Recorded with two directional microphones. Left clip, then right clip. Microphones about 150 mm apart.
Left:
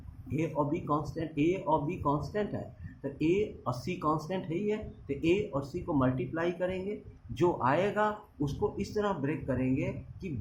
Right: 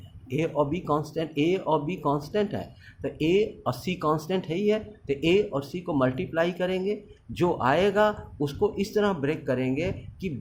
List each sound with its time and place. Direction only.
0.3 s speech: 50° right (ahead or behind)